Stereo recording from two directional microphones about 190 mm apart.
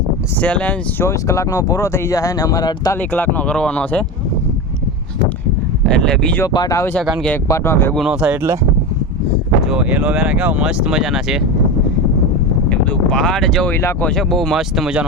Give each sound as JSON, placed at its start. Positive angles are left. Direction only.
{"t": 0.3, "sound": "speech", "side_deg": 5}
{"t": 3.0, "sound": "speech", "side_deg": 10}
{"t": 5.8, "sound": "speech", "side_deg": 5}
{"t": 6.5, "sound": "speech", "side_deg": 20}
{"t": 7.9, "sound": "speech", "side_deg": -5}
{"t": 9.6, "sound": "speech", "side_deg": -5}
{"t": 12.6, "sound": "speech", "side_deg": 5}